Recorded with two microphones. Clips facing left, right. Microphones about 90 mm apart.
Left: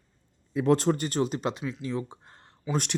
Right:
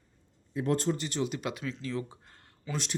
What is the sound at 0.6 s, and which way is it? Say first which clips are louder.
Speech: left 6 dB; 90° left.